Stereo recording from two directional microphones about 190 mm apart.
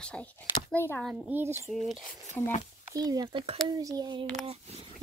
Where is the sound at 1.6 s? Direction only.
Centre (ahead or behind).